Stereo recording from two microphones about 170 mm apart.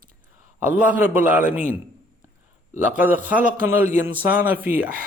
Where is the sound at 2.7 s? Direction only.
10° right (ahead or behind).